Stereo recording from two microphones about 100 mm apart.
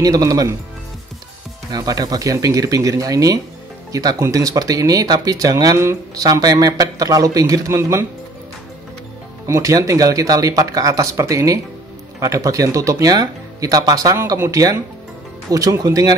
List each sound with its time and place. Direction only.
0.0 s speech: 35° right (ahead or behind)
1.7 s speech: 40° right (ahead or behind)
9.5 s speech: 35° right (ahead or behind)